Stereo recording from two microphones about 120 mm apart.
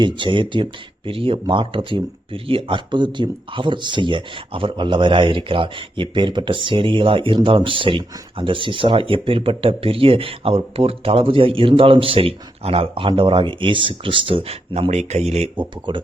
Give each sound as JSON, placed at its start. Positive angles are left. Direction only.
{"t": 0.0, "sound": "speech", "side_deg": -40}
{"t": 15.9, "sound": "speech", "side_deg": -40}